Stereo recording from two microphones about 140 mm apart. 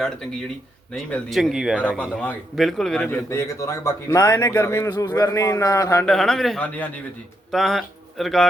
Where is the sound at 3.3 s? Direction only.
20° left (ahead or behind).